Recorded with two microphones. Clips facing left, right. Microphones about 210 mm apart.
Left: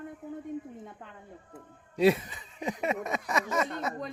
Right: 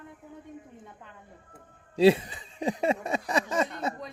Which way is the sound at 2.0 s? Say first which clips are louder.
Right 4 dB; 30° right (ahead or behind).